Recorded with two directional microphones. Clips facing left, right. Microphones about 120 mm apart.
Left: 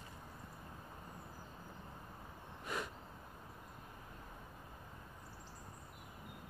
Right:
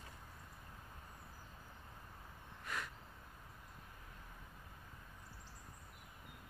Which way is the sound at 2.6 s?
20° left (ahead or behind).